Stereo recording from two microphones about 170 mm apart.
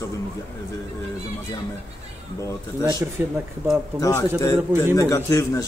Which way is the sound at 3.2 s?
10° right (ahead or behind).